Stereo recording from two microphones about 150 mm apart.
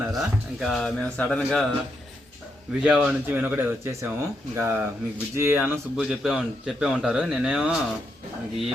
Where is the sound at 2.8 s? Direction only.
10° right (ahead or behind).